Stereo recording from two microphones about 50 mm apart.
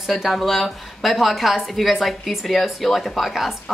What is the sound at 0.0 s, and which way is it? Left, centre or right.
A woman's voice, centre.